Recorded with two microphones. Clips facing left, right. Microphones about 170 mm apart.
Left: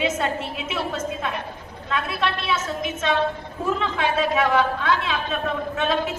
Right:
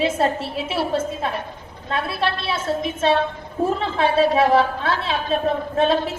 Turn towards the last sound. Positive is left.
turn(degrees=-35)  # may be behind; listen again after turning